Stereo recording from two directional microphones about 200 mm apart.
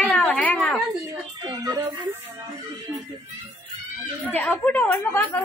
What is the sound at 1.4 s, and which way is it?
Speech, 20° right (ahead or behind).